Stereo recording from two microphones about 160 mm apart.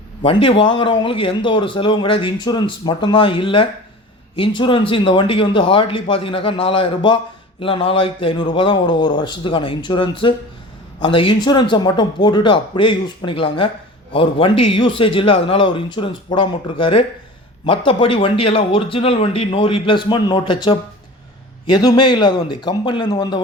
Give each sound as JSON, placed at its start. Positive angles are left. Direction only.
{"t": 0.2, "sound": "speech", "side_deg": 35}